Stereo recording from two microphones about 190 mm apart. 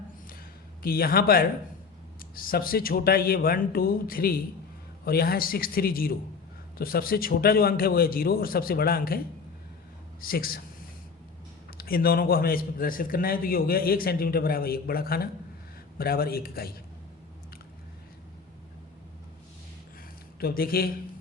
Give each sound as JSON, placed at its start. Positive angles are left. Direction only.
{"t": 0.8, "sound": "a man's voice", "side_deg": 50}
{"t": 11.8, "sound": "a man's voice", "side_deg": 50}
{"t": 20.4, "sound": "a man's voice", "side_deg": 50}